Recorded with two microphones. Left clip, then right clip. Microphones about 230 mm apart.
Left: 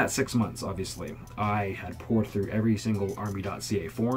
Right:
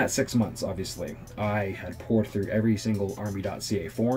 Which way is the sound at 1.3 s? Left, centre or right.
Centre.